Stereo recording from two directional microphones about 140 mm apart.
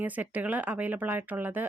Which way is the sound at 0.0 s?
10° right (ahead or behind).